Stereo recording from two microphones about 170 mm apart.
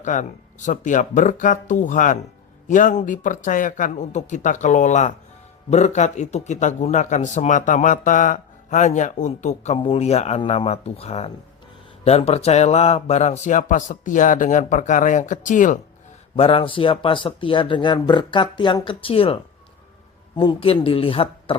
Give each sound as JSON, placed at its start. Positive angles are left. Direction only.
{"t": 0.0, "sound": "speech", "side_deg": 45}
{"t": 16.3, "sound": "speech", "side_deg": 35}